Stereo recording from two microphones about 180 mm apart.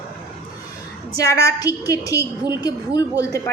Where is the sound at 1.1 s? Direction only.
20° left (ahead or behind).